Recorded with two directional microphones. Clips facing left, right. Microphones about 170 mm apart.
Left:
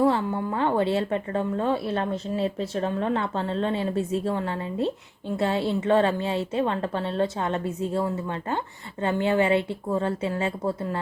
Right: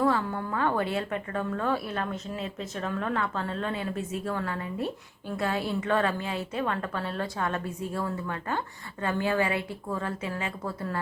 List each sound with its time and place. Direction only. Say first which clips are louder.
0.0 s a woman's voice: left 4 dB; 25° left (ahead or behind)